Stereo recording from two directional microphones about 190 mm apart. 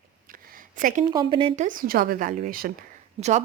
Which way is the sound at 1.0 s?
25° right (ahead or behind).